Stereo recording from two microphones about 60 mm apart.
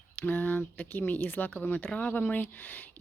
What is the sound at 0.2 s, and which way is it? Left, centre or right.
Speech, left.